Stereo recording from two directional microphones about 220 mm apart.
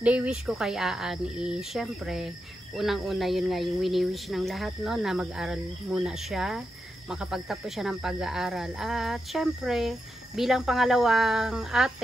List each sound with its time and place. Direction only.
0.0 s speech: 5° right (ahead or behind)